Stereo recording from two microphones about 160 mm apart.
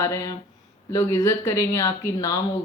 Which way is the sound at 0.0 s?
20° left (ahead or behind).